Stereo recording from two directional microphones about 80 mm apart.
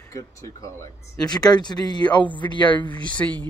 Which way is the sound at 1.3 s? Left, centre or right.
Left.